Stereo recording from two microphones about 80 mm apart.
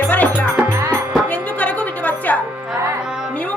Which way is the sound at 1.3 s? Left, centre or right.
Centre.